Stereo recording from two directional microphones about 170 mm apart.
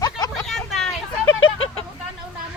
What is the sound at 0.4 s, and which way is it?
Vehicle, centre (ahead or behind).